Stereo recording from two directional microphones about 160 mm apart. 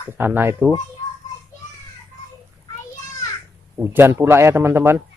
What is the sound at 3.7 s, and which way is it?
A man's voice, 15° right (ahead or behind).